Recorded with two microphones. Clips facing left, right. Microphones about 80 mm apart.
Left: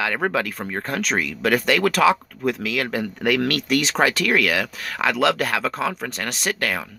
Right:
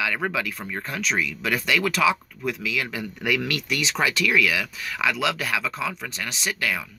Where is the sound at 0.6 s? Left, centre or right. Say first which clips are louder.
Left 4 dB; left.